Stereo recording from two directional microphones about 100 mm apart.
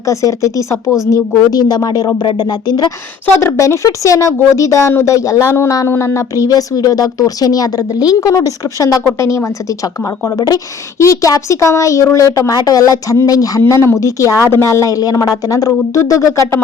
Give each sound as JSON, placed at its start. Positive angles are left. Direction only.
{"t": 0.0, "sound": "speech", "side_deg": 30}
{"t": 3.4, "sound": "speech", "side_deg": 30}